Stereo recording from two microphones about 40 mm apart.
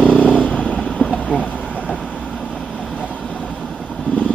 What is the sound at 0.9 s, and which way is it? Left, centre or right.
Boat, centre.